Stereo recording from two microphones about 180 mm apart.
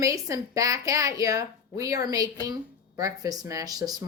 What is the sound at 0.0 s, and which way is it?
Speech, 20° right (ahead or behind).